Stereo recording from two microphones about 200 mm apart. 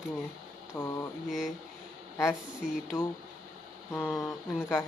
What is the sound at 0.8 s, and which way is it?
Speech, centre (ahead or behind).